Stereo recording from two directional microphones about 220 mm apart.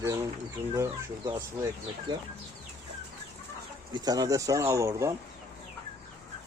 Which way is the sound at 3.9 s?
15° right (ahead or behind).